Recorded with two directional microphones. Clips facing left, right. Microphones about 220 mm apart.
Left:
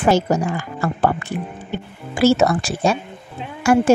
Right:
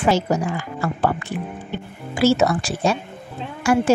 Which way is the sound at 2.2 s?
50° left (ahead or behind).